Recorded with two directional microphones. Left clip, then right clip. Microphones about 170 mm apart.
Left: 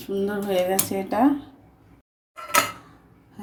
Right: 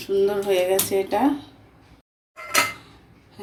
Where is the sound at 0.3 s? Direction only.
45° left (ahead or behind).